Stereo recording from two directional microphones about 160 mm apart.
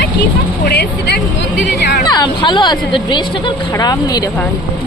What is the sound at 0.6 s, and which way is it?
Speech, 90° left.